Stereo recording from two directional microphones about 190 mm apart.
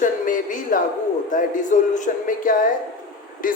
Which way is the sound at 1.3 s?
45° left (ahead or behind).